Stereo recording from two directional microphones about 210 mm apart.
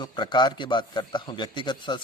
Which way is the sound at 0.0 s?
20° left (ahead or behind).